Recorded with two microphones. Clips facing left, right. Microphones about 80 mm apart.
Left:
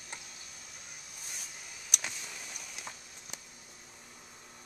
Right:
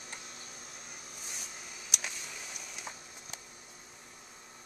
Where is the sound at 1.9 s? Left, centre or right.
Centre.